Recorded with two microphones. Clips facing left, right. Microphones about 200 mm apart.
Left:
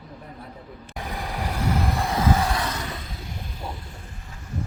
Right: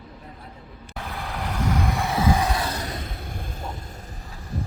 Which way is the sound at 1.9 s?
Centre (ahead or behind).